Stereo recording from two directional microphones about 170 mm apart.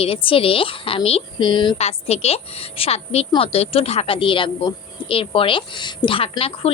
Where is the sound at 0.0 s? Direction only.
30° left (ahead or behind).